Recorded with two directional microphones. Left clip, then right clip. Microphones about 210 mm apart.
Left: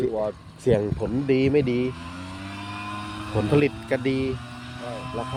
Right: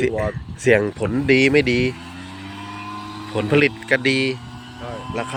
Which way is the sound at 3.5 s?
5° left (ahead or behind).